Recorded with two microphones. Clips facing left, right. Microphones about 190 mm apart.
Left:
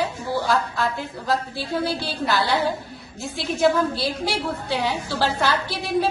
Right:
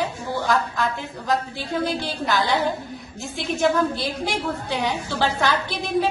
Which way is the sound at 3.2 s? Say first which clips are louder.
Left 2 dB; centre (ahead or behind).